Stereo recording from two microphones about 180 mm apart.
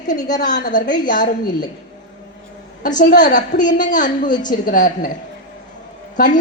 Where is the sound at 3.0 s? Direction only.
45° left (ahead or behind).